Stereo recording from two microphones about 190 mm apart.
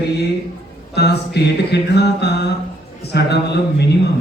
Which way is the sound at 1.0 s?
60° left (ahead or behind).